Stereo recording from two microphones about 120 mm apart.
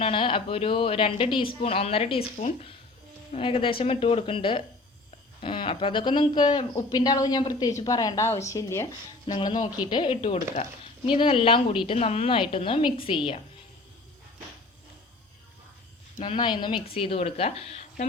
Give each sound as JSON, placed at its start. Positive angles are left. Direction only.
{"t": 0.0, "sound": "speech", "side_deg": 50}
{"t": 3.3, "sound": "a woman's voice", "side_deg": 50}
{"t": 9.2, "sound": "speech", "side_deg": 40}
{"t": 11.9, "sound": "speech", "side_deg": 60}
{"t": 16.1, "sound": "a woman's voice", "side_deg": 50}